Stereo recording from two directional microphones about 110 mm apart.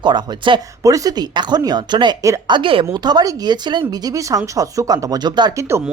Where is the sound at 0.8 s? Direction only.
30° right (ahead or behind).